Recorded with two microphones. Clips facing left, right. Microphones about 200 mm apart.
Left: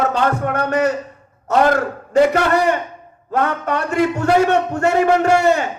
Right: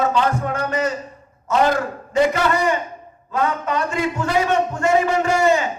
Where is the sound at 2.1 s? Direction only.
65° left (ahead or behind).